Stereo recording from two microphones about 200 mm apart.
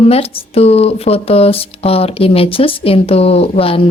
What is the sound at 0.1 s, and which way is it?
Speech, 30° left (ahead or behind).